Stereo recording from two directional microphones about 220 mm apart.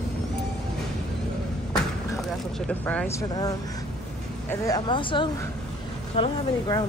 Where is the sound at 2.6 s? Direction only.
5° left (ahead or behind).